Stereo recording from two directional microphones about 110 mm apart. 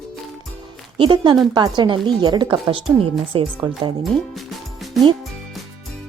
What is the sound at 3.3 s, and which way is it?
Speech, 50° right (ahead or behind).